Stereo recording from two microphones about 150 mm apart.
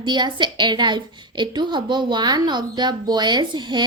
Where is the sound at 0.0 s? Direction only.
30° right (ahead or behind).